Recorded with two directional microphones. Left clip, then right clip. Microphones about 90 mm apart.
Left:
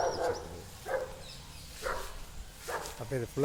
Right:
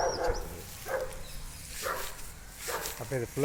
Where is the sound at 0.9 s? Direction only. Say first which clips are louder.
Even; 15° left (ahead or behind).